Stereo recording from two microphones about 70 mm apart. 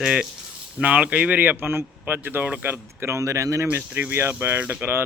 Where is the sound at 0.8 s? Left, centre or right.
Centre; by 3.6 s right.